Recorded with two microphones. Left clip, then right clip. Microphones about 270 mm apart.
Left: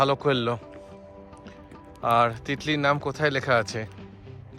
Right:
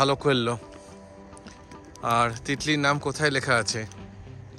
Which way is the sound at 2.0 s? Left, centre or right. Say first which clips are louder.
Left 2 dB; centre.